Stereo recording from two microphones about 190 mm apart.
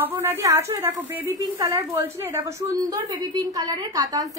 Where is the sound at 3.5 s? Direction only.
20° right (ahead or behind).